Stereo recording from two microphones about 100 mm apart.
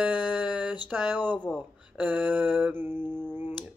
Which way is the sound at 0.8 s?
15° right (ahead or behind).